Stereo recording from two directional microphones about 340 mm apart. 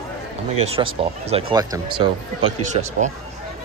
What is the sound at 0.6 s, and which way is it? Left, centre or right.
Speech, centre.